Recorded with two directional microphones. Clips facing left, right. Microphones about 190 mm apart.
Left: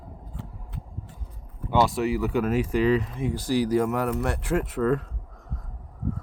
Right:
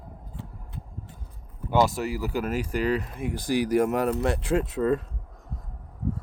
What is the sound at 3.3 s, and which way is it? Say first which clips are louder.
Speech: even; 15° right (ahead or behind).